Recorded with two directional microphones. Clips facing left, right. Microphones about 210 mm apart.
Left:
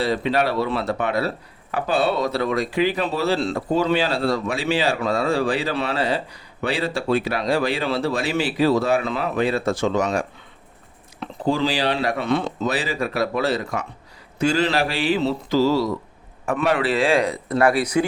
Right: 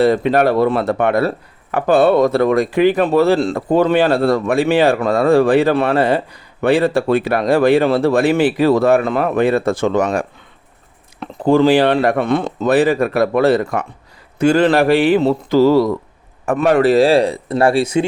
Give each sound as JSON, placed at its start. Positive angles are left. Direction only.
{"t": 0.0, "sound": "speech", "side_deg": -50}
{"t": 14.3, "sound": "mantra", "side_deg": -55}
{"t": 16.5, "sound": "speech", "side_deg": -45}